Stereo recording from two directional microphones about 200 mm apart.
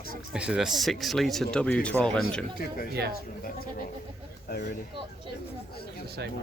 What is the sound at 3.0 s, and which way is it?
Speech, 55° right (ahead or behind).